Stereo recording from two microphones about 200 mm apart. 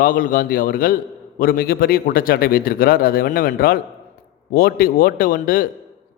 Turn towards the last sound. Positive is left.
turn(degrees=45)  # may be behind; listen again after turning